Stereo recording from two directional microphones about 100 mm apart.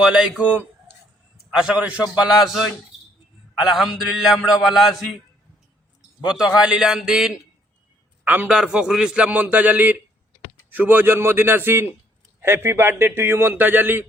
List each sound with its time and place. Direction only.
0.0 s a man's voice: 10° right (ahead or behind)
3.7 s a man's voice: centre (ahead or behind)
6.2 s a man's voice: 5° right (ahead or behind); by 14.0 s 20° right (ahead or behind)